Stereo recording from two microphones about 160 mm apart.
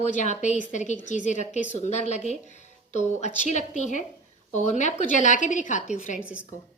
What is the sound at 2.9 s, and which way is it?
A woman's voice, 45° left (ahead or behind).